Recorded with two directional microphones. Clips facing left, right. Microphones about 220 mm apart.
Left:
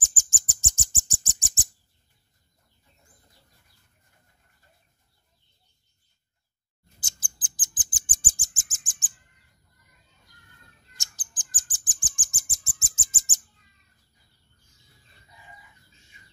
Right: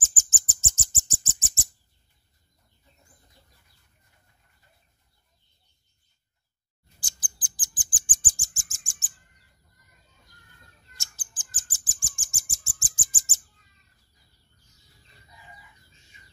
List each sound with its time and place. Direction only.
0.0 s bird: 15° left (ahead or behind)
7.0 s bird: 25° left (ahead or behind)
11.0 s bird: 15° left (ahead or behind)